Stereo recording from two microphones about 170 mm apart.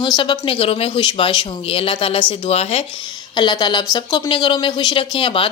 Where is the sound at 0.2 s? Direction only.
30° left (ahead or behind).